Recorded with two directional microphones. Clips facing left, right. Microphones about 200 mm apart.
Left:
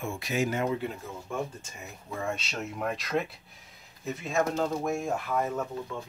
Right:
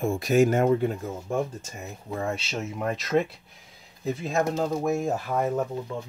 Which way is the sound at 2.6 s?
Centre (ahead or behind).